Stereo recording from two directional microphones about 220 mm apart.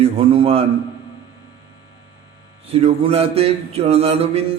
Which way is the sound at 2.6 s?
25° right (ahead or behind).